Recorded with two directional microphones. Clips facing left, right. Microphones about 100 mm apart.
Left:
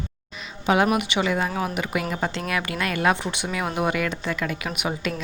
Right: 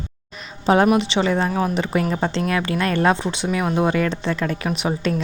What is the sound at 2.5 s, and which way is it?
A woman's voice, 25° right (ahead or behind).